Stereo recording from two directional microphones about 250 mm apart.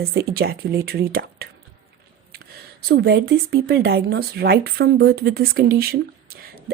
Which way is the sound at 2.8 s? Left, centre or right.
Right.